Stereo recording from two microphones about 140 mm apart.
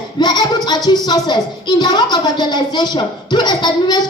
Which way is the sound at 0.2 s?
30° left (ahead or behind).